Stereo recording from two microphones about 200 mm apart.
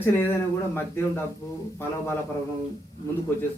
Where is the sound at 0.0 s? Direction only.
10° left (ahead or behind).